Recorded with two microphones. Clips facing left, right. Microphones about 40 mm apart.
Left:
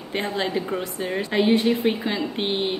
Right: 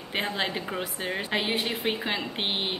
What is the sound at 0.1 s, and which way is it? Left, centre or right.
Speech, centre.